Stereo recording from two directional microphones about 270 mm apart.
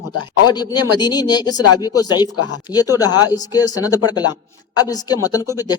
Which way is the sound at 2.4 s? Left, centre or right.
Left.